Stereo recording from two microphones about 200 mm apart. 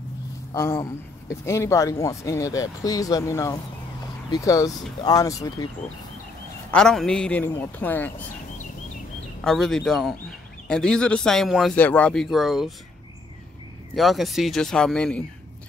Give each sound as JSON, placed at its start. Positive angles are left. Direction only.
{"t": 0.5, "sound": "speech", "side_deg": 15}
{"t": 6.7, "sound": "speech", "side_deg": 5}
{"t": 9.4, "sound": "speech", "side_deg": 0}
{"t": 13.9, "sound": "speech", "side_deg": 0}